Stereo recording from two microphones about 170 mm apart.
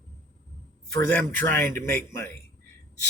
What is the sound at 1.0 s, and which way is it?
Speech, 15° left (ahead or behind).